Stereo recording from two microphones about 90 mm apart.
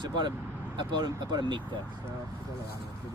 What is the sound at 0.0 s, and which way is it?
Speech, 55° right (ahead or behind).